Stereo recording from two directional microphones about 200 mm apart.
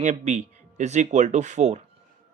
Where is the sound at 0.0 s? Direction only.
35° right (ahead or behind).